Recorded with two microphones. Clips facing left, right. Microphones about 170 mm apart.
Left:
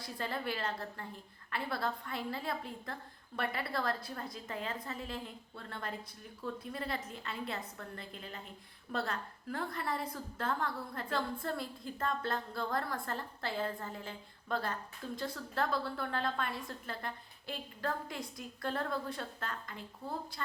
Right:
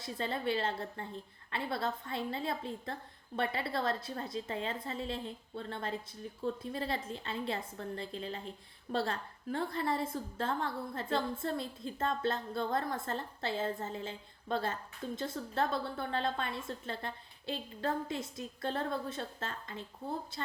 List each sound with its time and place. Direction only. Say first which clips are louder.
0.0 s a woman's voice: right 3 dB; 25° right (ahead or behind)